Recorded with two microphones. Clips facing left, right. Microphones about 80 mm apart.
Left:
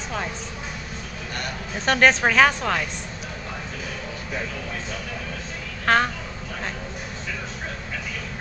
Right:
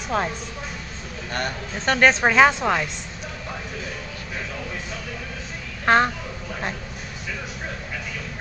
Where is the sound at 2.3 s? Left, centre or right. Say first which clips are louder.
Right 2 dB; centre.